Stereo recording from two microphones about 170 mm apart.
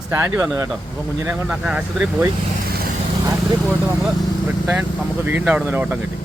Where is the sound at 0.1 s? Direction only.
15° right (ahead or behind).